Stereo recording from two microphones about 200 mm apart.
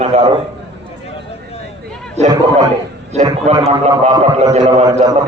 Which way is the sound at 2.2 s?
35° right (ahead or behind).